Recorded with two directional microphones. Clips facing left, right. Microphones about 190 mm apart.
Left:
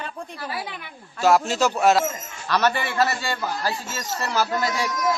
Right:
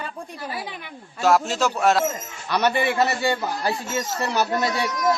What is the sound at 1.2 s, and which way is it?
Speech, centre (ahead or behind).